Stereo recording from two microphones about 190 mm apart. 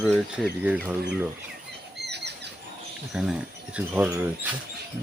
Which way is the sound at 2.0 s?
60° right (ahead or behind).